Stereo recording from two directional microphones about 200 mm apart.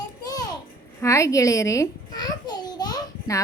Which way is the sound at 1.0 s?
15° left (ahead or behind).